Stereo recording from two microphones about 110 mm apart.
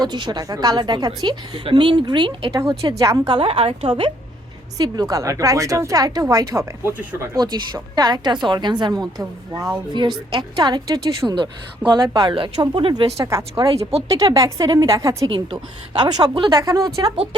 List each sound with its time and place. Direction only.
0.0 s a woman's voice: 40° right (ahead or behind)
2.6 s a woman's voice: 35° right (ahead or behind)
3.2 s a woman's voice: 55° right (ahead or behind)
4.8 s a woman's voice: 35° right (ahead or behind)
7.3 s a woman's voice: 40° right (ahead or behind)
9.9 s a woman's voice: 45° right (ahead or behind)
13.1 s a woman's voice: 25° right (ahead or behind)
15.3 s speech: 50° right (ahead or behind)
16.6 s a woman's voice: 35° right (ahead or behind)